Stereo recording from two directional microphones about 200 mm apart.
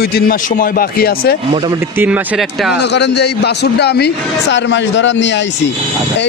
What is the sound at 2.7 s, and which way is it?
A man's voice, 60° left (ahead or behind).